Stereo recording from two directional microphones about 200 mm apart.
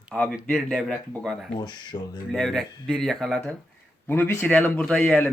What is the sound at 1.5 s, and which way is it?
Speech, 20° left (ahead or behind).